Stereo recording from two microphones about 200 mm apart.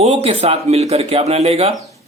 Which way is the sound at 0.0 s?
30° right (ahead or behind).